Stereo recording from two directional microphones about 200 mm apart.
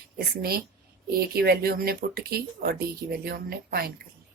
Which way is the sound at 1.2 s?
50° right (ahead or behind).